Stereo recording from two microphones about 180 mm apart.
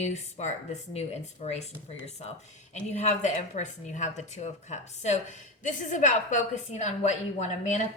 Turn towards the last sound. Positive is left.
turn(degrees=40)  # may be behind; listen again after turning